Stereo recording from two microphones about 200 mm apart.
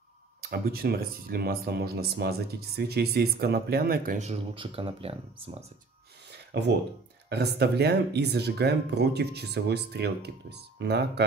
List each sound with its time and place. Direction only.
0.4 s speech: 50° right (ahead or behind); by 5.6 s 30° right (ahead or behind)
6.5 s speech: 55° right (ahead or behind)